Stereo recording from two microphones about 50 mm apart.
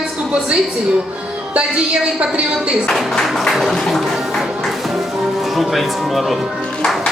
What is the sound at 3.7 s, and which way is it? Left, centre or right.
Music, centre.